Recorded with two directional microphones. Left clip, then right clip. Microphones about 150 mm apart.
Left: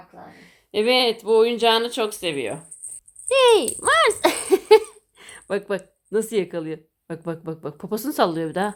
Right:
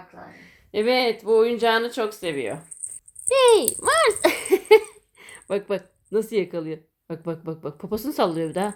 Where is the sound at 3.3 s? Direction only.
Centre (ahead or behind).